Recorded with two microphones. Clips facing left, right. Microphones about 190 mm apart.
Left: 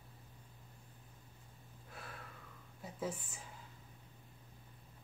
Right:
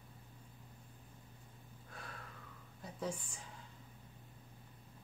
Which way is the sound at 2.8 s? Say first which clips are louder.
Even; 5° left (ahead or behind).